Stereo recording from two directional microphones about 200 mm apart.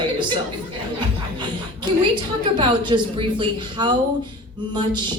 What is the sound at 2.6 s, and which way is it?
Speech, 25° right (ahead or behind).